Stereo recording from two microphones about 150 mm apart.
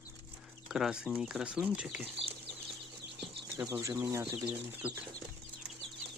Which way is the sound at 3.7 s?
20° right (ahead or behind).